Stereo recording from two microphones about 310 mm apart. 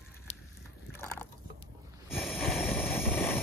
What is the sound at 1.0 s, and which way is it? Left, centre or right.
Fowl, centre.